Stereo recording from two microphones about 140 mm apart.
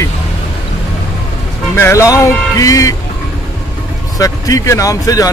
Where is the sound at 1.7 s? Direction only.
20° left (ahead or behind).